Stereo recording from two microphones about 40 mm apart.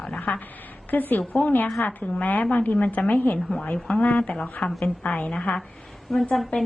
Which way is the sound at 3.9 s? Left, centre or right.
Left.